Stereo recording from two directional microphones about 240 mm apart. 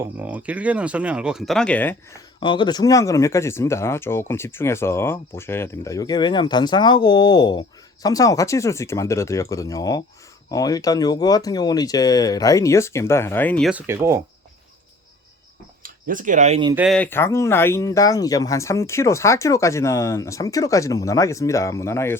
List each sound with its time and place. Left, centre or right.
0.0 s speech: centre
2.4 s speech: centre
15.8 s speech: right
16.7 s speech: centre